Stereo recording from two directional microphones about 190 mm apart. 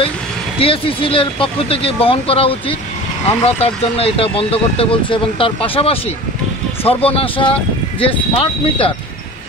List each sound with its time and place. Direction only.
0.6 s speech: 30° left (ahead or behind)